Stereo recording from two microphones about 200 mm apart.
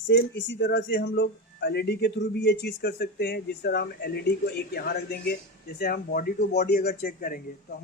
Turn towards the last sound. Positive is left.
turn(degrees=45)  # may be behind; listen again after turning